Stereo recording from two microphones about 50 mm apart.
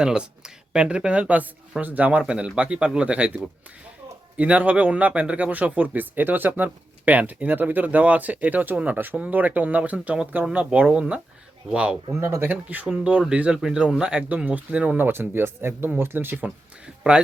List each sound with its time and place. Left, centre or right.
0.0 s speech: centre
12.1 s speech: right
12.5 s speech: right
14.9 s speech: right
16.8 s speech: centre